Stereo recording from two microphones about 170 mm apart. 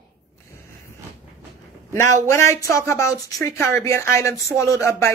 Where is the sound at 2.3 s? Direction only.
15° left (ahead or behind).